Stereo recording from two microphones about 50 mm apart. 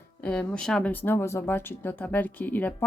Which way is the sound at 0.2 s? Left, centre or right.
Left.